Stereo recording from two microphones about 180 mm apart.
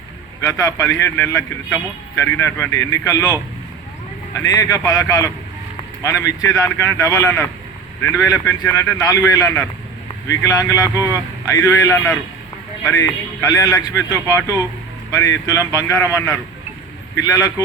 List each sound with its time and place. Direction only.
0.4 s speech: 15° left (ahead or behind)
4.4 s a man's voice: 20° left (ahead or behind)